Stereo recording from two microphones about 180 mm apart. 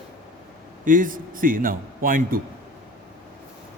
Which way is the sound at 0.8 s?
50° right (ahead or behind).